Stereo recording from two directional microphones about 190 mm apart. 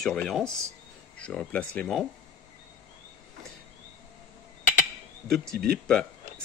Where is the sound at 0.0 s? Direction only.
Centre (ahead or behind).